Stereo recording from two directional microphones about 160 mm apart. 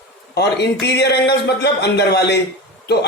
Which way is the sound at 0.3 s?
90° left.